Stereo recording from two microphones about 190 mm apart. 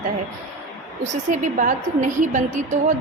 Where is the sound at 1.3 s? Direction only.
40° right (ahead or behind).